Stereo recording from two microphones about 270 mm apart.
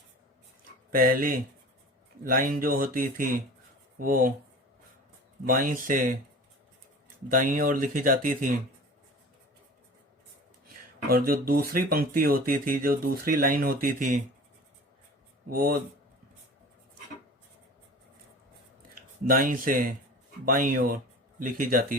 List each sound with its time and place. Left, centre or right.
0.9 s speech: right
5.5 s speech: right
7.3 s speech: right
11.1 s speech: right
15.4 s speech: right
19.2 s speech: right